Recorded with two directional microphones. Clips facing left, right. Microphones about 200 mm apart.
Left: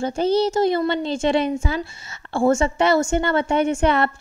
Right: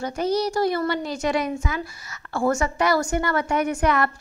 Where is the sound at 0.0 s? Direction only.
30° left (ahead or behind).